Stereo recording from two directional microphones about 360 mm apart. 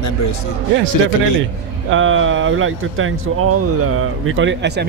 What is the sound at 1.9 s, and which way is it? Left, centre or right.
Speech, right.